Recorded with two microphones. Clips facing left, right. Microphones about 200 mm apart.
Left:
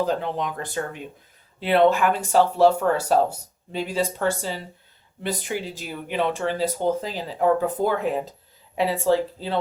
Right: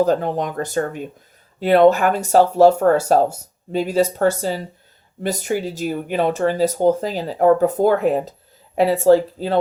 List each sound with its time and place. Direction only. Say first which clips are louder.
0.0 s speech: right 6 dB; 45° right (ahead or behind)